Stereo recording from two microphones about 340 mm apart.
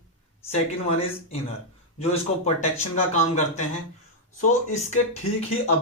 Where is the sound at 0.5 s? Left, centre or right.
Centre.